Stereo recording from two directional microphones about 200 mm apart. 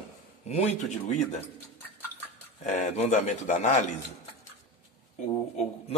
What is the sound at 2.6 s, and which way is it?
Speech, 35° left (ahead or behind).